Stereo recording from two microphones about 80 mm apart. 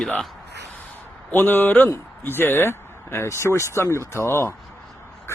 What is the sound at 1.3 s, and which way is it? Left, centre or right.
A man's voice, left.